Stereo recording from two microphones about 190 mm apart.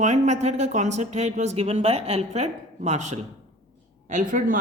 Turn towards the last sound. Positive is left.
turn(degrees=-45)  # may be behind; listen again after turning